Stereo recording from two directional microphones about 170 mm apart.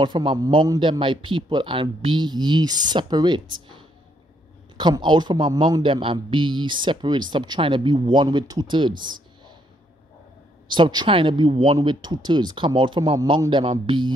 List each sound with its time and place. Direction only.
0.0 s a man's voice: 30° right (ahead or behind)
10.7 s a man's voice: 25° right (ahead or behind)